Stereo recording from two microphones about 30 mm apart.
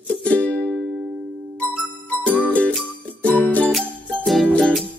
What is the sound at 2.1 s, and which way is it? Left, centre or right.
Music, left.